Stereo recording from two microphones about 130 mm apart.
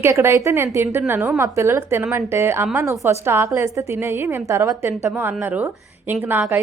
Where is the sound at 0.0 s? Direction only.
20° right (ahead or behind).